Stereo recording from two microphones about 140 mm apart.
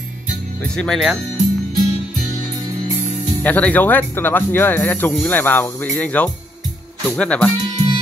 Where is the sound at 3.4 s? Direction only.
10° left (ahead or behind).